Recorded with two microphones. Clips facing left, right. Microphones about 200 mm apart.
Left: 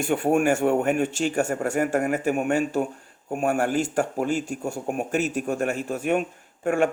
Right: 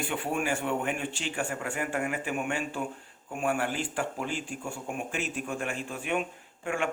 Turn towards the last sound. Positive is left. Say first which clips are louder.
# left 9 dB
turn(degrees=45)  # may be behind; listen again after turning